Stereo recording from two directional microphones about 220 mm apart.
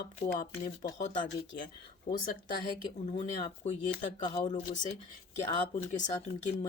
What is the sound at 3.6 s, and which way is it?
Speech, 35° left (ahead or behind).